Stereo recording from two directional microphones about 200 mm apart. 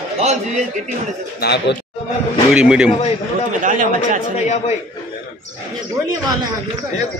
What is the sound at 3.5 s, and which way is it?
Speech, 40° right (ahead or behind).